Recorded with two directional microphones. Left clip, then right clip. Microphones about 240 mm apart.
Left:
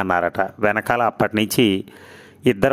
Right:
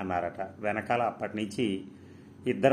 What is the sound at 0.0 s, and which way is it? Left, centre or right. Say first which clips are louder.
Speech: left 13 dB; left.